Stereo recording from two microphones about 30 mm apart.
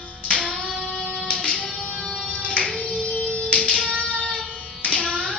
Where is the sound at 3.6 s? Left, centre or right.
Left.